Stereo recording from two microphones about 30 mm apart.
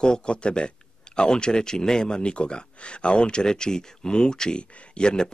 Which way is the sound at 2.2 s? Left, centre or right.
Left.